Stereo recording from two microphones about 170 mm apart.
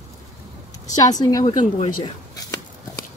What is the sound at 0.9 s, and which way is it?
Speech, 20° left (ahead or behind).